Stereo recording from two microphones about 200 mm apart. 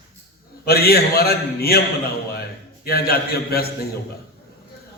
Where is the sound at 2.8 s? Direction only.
50° left (ahead or behind).